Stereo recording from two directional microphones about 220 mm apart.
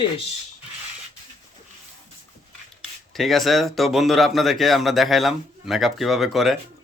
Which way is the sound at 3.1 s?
Centre (ahead or behind).